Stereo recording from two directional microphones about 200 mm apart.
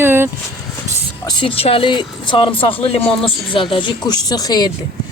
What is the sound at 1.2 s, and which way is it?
Speech, 25° left (ahead or behind).